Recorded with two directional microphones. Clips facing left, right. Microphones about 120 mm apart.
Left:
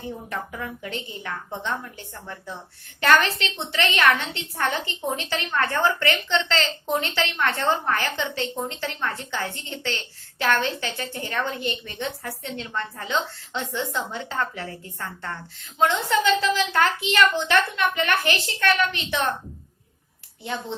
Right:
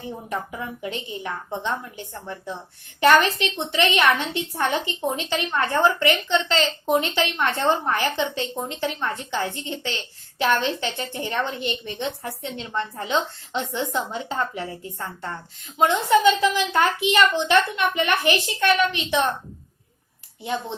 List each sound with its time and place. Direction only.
0.3 s a woman's voice: 20° right (ahead or behind)
20.4 s a woman's voice: 15° right (ahead or behind)